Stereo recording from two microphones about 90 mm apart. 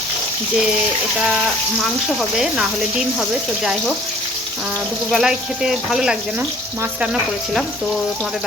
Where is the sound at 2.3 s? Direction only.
5° right (ahead or behind).